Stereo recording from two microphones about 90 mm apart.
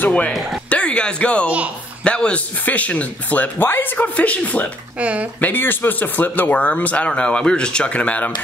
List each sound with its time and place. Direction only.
0.0 s speech: 15° left (ahead or behind)
4.9 s speech: 15° right (ahead or behind)
5.4 s speech: 20° left (ahead or behind)